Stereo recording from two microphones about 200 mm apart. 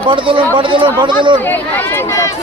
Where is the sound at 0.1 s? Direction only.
25° right (ahead or behind).